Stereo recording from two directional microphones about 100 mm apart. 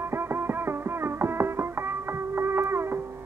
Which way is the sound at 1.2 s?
25° right (ahead or behind).